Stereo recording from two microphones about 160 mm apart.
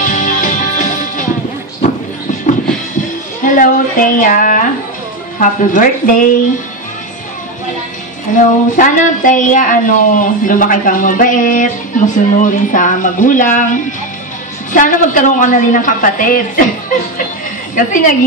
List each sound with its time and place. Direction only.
0.0 s music: 55° left (ahead or behind)
3.4 s a sound: 55° left (ahead or behind)
5.4 s speech: 55° left (ahead or behind)
8.4 s speech: 55° left (ahead or behind)
17.7 s speech: 55° left (ahead or behind)